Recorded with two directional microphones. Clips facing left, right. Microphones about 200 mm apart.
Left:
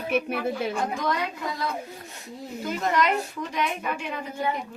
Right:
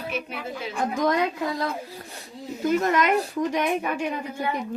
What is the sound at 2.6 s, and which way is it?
Speech, 50° right (ahead or behind).